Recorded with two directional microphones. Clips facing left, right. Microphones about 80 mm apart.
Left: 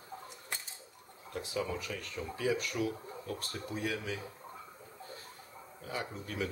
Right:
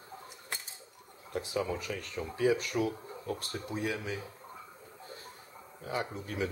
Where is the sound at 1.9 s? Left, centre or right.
Right.